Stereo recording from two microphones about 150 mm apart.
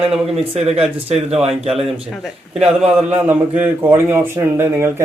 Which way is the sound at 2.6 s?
45° right (ahead or behind).